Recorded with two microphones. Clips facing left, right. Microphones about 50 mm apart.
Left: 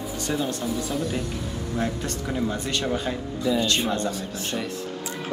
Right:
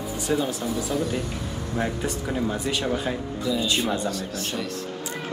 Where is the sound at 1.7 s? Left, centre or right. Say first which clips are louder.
Right 1 dB; centre.